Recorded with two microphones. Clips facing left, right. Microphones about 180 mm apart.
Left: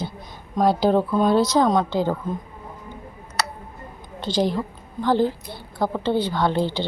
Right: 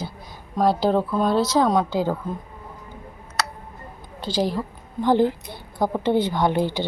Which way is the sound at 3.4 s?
Centre (ahead or behind).